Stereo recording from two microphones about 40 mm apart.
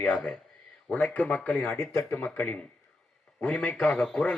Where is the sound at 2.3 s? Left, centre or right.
Left.